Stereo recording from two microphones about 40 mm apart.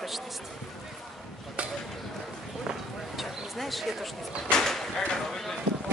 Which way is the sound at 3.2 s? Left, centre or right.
Centre.